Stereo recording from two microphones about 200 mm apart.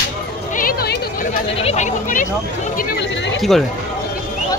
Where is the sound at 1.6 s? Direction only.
35° left (ahead or behind).